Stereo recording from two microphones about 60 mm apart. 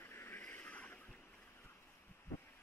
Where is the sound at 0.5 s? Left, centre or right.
Left.